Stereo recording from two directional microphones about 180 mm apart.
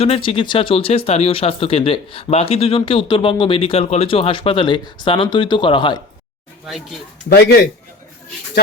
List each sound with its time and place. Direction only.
0.0 s speech: 30° left (ahead or behind)